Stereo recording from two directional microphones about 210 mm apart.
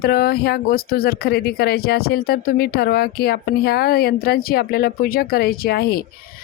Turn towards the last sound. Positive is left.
turn(degrees=45)  # may be behind; listen again after turning